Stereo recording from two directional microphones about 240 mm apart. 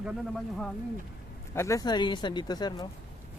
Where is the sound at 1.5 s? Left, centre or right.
Centre.